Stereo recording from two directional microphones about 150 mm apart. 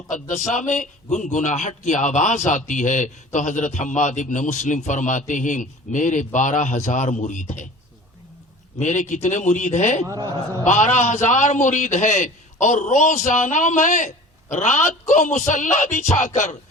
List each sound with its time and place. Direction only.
0.1 s a man's voice: 55° left (ahead or behind)
8.8 s a man's voice: 55° left (ahead or behind)
10.1 s a man's voice: 25° right (ahead or behind)
10.6 s a man's voice: 55° left (ahead or behind)